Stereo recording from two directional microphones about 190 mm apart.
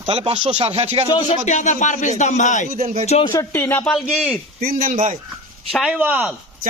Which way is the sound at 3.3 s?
10° left (ahead or behind).